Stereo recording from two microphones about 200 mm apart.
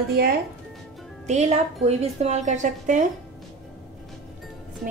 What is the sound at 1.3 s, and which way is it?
A woman's voice, 35° right (ahead or behind).